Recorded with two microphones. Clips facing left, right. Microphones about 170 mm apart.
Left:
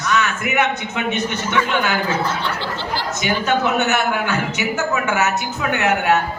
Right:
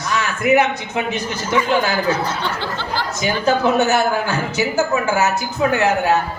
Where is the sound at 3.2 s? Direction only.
35° right (ahead or behind).